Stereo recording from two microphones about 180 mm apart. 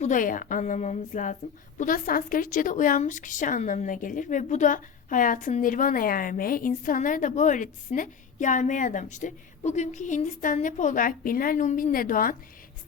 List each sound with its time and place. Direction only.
0.0 s a woman's voice: 45° left (ahead or behind)